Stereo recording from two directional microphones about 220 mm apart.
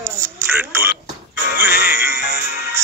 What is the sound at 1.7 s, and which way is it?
Music, 40° left (ahead or behind).